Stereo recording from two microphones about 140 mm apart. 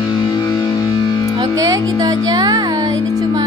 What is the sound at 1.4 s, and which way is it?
Music, 25° right (ahead or behind).